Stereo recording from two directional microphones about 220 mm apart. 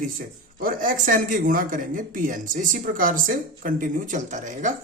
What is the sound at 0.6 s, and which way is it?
Speech, 40° right (ahead or behind).